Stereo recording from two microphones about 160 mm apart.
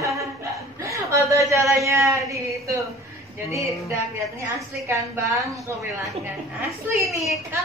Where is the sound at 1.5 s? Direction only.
20° right (ahead or behind).